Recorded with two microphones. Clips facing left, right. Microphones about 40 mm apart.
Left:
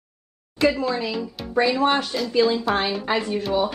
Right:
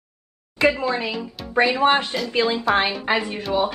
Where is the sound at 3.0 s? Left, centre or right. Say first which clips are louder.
Right 1 dB; right.